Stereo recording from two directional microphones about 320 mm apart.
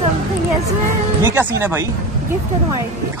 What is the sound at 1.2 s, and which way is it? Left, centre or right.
Speech, centre.